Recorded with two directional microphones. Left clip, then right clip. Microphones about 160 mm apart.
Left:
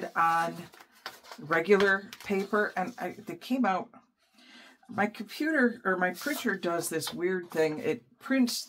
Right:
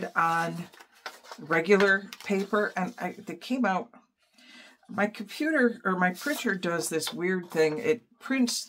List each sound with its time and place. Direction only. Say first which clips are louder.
0.0 s speech: even; 25° right (ahead or behind)
4.9 s speech: right 1 dB; 25° right (ahead or behind)